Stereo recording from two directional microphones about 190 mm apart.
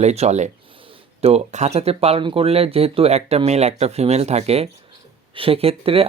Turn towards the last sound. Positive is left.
turn(degrees=-30)  # may be behind; listen again after turning